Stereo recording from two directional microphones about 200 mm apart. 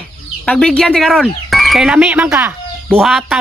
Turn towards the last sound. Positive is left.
turn(degrees=0)  # may be behind; listen again after turning